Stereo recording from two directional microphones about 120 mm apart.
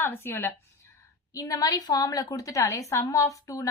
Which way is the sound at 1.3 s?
30° left (ahead or behind).